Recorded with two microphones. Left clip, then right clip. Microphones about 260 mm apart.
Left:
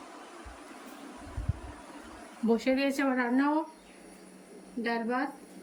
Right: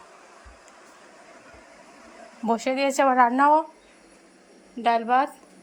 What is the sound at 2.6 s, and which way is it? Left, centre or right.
A woman's voice, centre.